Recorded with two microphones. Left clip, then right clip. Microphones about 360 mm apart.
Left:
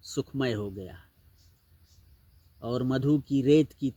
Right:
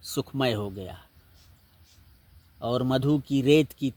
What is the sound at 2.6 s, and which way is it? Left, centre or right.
Speech, right.